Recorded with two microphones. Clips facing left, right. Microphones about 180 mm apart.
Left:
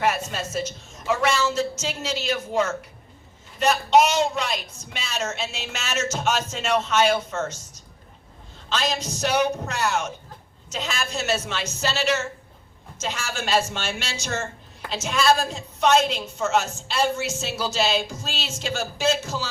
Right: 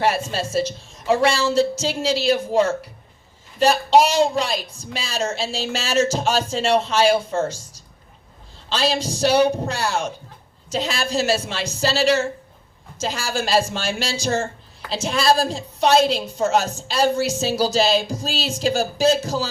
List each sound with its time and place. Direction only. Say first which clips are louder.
0.0 s a woman's voice: right 3 dB; 30° right (ahead or behind)
8.7 s a woman's voice: right 4 dB; 30° right (ahead or behind)